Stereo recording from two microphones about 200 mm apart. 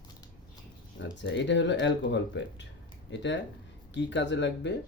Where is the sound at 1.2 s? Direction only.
65° left (ahead or behind).